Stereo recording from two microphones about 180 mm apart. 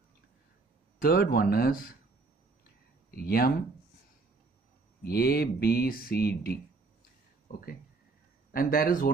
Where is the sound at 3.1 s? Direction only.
55° left (ahead or behind).